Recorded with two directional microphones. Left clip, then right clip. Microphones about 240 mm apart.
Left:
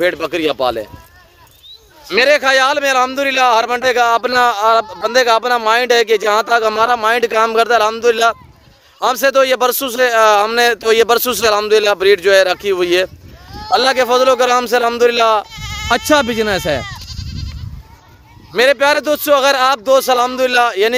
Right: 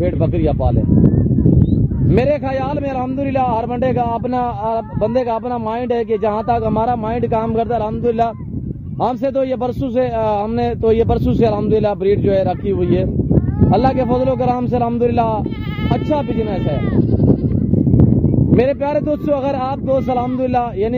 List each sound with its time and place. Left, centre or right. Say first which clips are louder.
0.0 s speech: left 3 dB; centre
2.0 s speech: left 6 dB; centre
18.6 s speech: left 7 dB; centre